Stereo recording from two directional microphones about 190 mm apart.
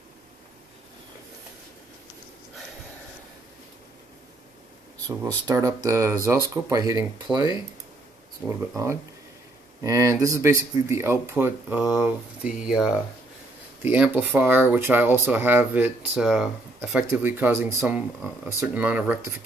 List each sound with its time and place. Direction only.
5.0 s speech: 15° right (ahead or behind)
7.3 s speech: 5° right (ahead or behind)
8.5 s speech: 15° right (ahead or behind)